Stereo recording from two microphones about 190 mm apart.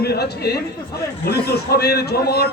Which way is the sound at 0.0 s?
55° left (ahead or behind).